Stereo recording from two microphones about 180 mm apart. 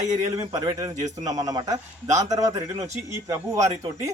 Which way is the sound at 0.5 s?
20° right (ahead or behind).